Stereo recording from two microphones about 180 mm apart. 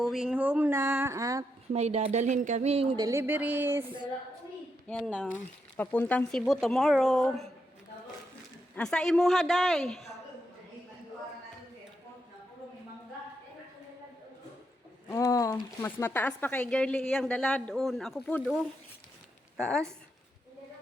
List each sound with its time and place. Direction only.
0.0 s speech: 5° right (ahead or behind); by 1.5 s 20° right (ahead or behind)
1.7 s speech: 35° right (ahead or behind)
3.0 s speech: 15° right (ahead or behind)
5.0 s speech: 5° left (ahead or behind)
8.7 s speech: 5° left (ahead or behind)
15.1 s speech: 20° left (ahead or behind)
19.5 s speech: centre (ahead or behind)